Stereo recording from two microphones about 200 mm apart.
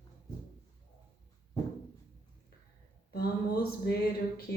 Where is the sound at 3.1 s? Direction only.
50° left (ahead or behind).